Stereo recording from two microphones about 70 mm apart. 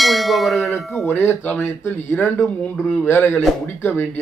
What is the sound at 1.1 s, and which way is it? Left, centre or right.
A man's voice, left.